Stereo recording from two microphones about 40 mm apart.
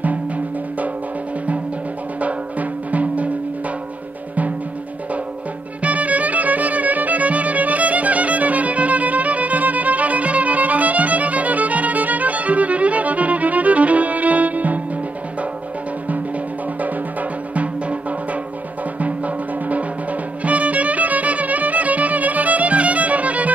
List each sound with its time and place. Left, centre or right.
2.1 s drum: right
5.8 s music: right
17.6 s music: right